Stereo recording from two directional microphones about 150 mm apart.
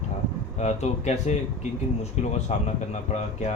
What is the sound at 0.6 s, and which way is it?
Speech, 50° left (ahead or behind).